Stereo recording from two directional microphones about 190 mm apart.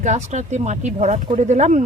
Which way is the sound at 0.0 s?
40° right (ahead or behind).